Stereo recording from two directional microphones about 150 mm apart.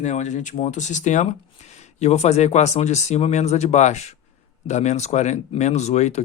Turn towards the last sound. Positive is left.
turn(degrees=50)  # may be behind; listen again after turning